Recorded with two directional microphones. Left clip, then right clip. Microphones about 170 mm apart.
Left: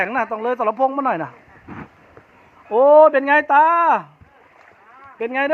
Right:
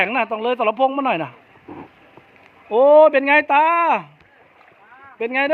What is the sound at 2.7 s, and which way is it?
Speech, 10° right (ahead or behind).